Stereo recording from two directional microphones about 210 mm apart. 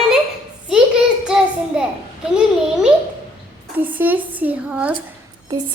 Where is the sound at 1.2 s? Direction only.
5° right (ahead or behind).